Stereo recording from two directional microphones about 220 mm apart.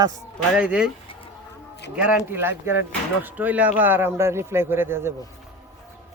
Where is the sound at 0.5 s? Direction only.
5° right (ahead or behind).